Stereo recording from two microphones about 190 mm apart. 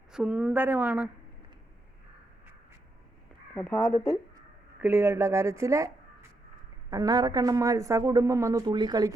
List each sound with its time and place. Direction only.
0.1 s speech: 5° right (ahead or behind)
3.5 s speech: 10° left (ahead or behind)
4.8 s speech: 15° right (ahead or behind)
6.9 s speech: 20° right (ahead or behind)